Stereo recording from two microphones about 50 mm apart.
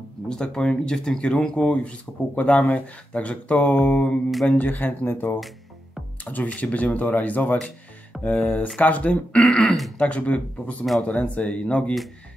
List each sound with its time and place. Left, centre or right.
0.3 s speech: centre
4.3 s mantra: centre
4.6 s speech: left
6.2 s speech: left
7.5 s music: centre
8.2 s speech: left
9.4 s speech: centre
9.9 s speech: left